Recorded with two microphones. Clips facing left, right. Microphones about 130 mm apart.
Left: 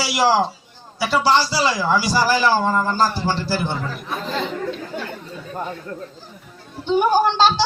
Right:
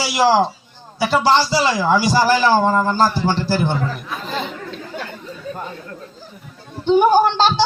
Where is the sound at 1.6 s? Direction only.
25° right (ahead or behind).